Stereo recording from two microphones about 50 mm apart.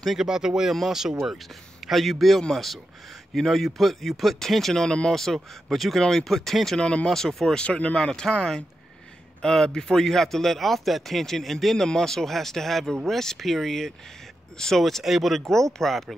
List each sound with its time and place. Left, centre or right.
0.2 s speech: centre
6.8 s speech: left
7.1 s speech: centre
7.5 s speech: left; by 16.2 s centre